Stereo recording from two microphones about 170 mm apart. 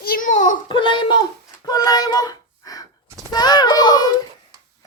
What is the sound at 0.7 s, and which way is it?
Speech, 30° left (ahead or behind).